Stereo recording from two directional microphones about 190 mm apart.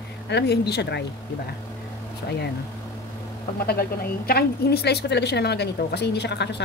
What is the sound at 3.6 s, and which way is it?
Speech, 55° left (ahead or behind).